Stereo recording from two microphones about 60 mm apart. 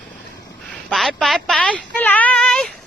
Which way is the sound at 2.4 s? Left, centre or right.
Centre.